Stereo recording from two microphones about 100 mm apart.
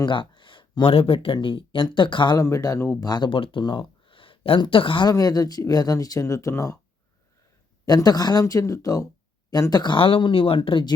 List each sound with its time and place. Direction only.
0.0 s speech: 55° left (ahead or behind)
2.4 s speech: 35° left (ahead or behind)
3.1 s speech: 55° left (ahead or behind)
5.0 s speech: 40° left (ahead or behind)
7.9 s speech: 40° left (ahead or behind)